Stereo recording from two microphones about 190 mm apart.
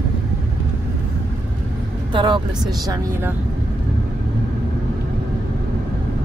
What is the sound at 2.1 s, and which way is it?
Speech, 25° right (ahead or behind).